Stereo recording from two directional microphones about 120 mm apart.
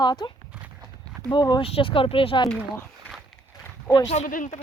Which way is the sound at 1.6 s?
50° left (ahead or behind).